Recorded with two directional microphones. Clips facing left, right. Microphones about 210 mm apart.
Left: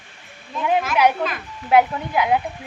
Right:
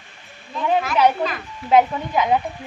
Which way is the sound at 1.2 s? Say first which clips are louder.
Right 1 dB; centre (ahead or behind).